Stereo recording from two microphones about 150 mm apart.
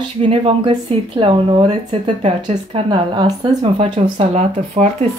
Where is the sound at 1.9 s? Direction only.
50° right (ahead or behind); by 3.5 s 30° right (ahead or behind).